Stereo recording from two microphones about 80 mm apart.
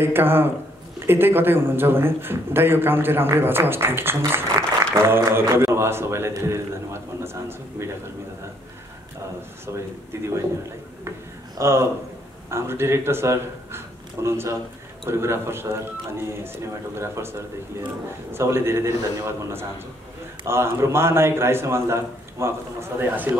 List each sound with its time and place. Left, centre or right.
0.0 s a man's voice: right
10.1 s a man's voice: right
11.6 s a man's voice: right